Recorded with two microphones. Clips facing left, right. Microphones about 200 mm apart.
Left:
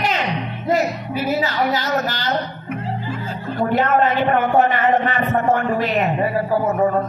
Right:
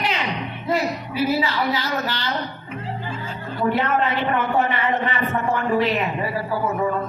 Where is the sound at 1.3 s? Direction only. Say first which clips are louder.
Left 2 dB; 45° left (ahead or behind).